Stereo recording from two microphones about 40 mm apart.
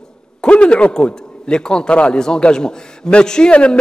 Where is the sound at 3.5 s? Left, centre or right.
Left.